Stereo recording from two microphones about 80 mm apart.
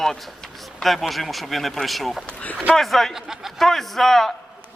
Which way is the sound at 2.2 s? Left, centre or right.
Centre.